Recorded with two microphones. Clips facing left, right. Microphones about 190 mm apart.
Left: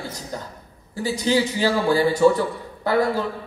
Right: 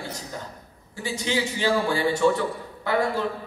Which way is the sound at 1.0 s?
35° left (ahead or behind).